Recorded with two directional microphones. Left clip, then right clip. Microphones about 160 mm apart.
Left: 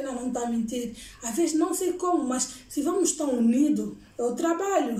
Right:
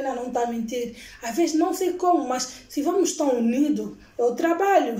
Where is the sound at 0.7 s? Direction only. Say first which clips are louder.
Right 4 dB; 25° left (ahead or behind).